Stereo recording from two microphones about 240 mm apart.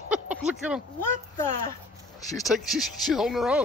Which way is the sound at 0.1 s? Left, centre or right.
Centre.